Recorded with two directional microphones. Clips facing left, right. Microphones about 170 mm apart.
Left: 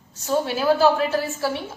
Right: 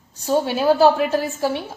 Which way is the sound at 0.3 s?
35° right (ahead or behind).